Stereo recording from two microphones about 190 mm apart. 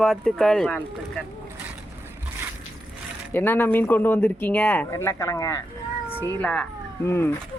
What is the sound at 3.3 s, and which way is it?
Speech, 10° left (ahead or behind).